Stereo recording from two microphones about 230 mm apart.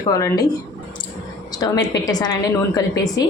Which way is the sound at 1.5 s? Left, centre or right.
Centre.